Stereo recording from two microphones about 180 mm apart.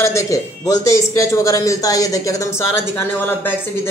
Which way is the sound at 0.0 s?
15° left (ahead or behind).